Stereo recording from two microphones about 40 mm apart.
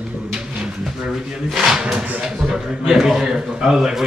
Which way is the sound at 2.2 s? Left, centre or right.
Centre.